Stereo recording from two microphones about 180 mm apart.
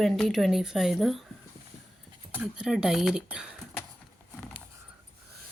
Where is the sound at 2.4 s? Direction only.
5° right (ahead or behind).